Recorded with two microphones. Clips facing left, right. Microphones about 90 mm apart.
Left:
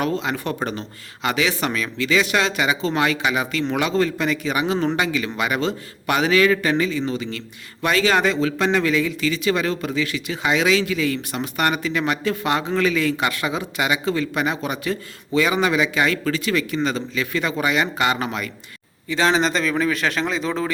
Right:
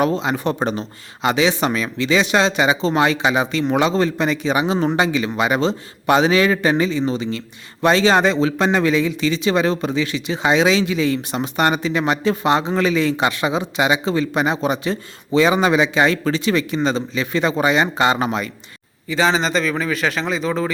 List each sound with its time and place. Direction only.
0.0 s a man's voice: 20° right (ahead or behind)
19.0 s a man's voice: centre (ahead or behind)